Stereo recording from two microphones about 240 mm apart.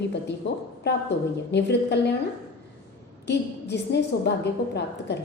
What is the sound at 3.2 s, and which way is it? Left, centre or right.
A woman's voice, left.